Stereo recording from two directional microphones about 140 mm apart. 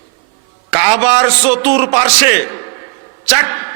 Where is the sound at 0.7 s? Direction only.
20° right (ahead or behind).